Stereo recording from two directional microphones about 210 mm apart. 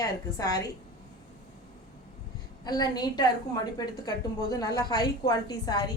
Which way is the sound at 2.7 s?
20° left (ahead or behind).